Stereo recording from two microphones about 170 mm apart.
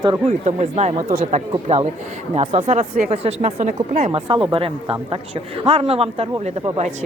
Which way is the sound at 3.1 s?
35° right (ahead or behind).